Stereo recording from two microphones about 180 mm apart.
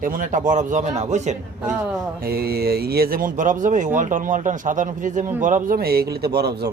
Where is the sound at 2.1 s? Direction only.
55° right (ahead or behind).